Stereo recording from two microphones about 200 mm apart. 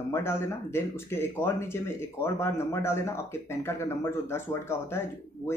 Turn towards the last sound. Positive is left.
turn(degrees=10)  # may be behind; listen again after turning